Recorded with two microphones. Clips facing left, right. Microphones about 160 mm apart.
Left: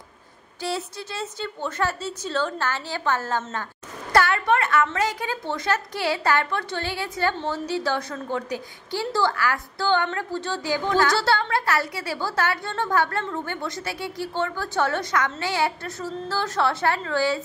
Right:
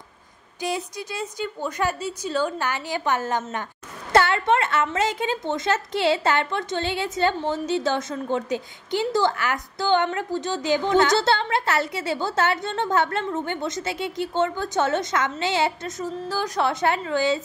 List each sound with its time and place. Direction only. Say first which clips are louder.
0.6 s a woman's voice: right 1 dB; 15° right (ahead or behind)
4.1 s a sound: right 1 dB; 25° right (ahead or behind)
4.9 s a woman's voice: right 2 dB; 25° right (ahead or behind)